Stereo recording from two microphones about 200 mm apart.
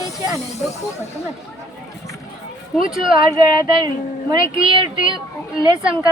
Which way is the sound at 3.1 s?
25° right (ahead or behind).